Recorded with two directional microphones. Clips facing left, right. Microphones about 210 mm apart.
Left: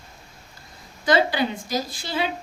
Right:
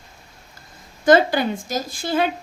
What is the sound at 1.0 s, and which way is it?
A woman's voice, 50° right (ahead or behind).